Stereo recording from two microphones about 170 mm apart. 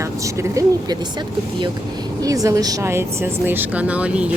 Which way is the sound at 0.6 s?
20° right (ahead or behind).